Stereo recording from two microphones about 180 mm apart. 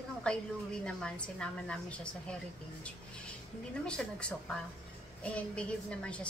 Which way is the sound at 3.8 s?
5° left (ahead or behind).